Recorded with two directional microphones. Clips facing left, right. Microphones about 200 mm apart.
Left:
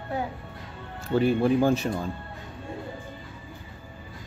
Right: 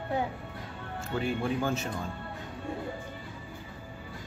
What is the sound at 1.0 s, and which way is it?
Speech, 35° left (ahead or behind).